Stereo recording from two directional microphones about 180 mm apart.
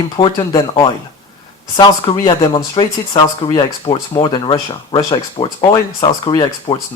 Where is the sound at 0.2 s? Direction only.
25° left (ahead or behind).